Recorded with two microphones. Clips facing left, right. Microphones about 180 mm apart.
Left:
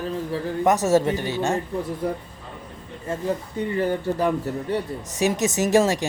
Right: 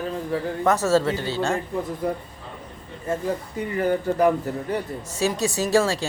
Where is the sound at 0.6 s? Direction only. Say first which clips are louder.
Left 1 dB; 15° left (ahead or behind).